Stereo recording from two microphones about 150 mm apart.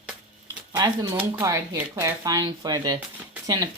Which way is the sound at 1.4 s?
20° right (ahead or behind).